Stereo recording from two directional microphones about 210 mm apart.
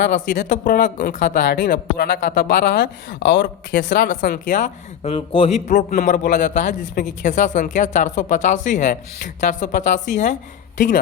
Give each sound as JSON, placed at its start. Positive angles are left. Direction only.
{"t": 0.0, "sound": "a man's voice", "side_deg": 40}
{"t": 4.1, "sound": "a man's voice", "side_deg": 40}